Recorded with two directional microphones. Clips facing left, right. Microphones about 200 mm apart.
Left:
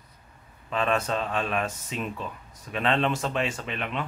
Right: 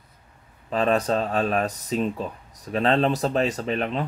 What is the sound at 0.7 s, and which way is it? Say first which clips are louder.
Speech: right 5 dB; 35° right (ahead or behind).